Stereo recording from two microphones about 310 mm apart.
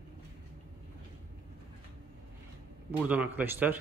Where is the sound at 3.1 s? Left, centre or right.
Centre.